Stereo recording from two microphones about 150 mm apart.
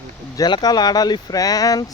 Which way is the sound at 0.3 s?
25° left (ahead or behind).